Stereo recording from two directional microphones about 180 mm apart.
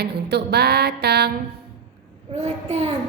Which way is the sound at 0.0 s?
65° right (ahead or behind).